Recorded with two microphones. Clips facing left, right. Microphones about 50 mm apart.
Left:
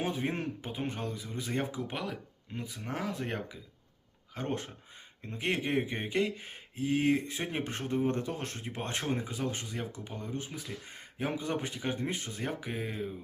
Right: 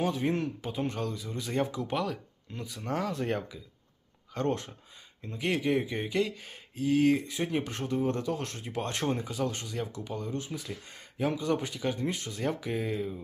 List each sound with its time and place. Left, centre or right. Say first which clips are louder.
0.0 s speech: right 4 dB; left
5.2 s speech: right 3 dB; left